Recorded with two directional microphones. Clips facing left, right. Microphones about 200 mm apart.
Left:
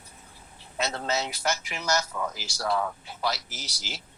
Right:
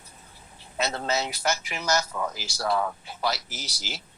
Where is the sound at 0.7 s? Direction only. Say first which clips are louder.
Right 2 dB; 5° right (ahead or behind).